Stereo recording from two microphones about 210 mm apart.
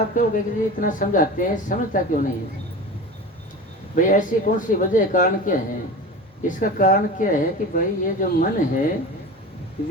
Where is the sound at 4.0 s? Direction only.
40° left (ahead or behind).